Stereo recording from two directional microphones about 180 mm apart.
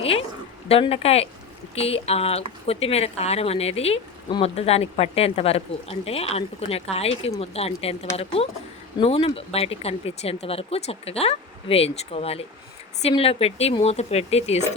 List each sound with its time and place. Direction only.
0.0 s a woman's voice: 35° left (ahead or behind)